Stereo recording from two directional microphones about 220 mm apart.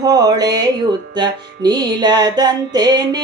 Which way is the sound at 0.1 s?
15° right (ahead or behind).